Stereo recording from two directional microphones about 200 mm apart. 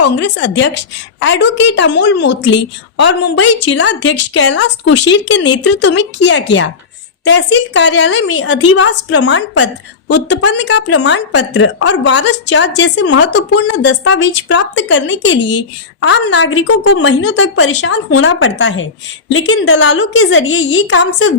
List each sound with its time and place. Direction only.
0.0 s a woman's voice: 60° left (ahead or behind)
10.1 s a woman's voice: 60° left (ahead or behind); by 16.6 s 80° left
17.0 s a woman's voice: 65° left (ahead or behind); by 21.3 s 80° left